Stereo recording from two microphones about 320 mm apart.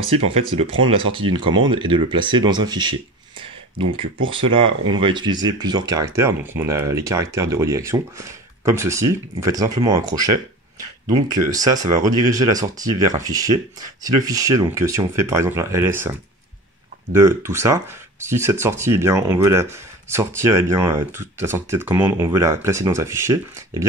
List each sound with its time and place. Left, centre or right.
0.1 s speech: centre
17.1 s speech: centre